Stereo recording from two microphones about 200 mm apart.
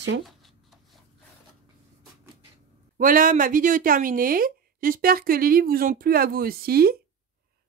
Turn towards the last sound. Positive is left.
turn(degrees=-50)  # may be behind; listen again after turning